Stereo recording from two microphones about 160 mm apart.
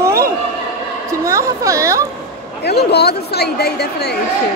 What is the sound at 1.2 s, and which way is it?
Speech, 20° right (ahead or behind).